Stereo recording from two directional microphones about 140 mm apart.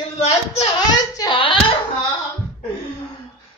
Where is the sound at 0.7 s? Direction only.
30° left (ahead or behind).